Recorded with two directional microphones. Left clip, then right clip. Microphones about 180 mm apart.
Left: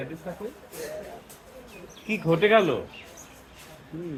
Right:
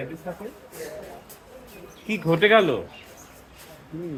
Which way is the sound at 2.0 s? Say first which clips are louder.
Right 2 dB; centre (ahead or behind).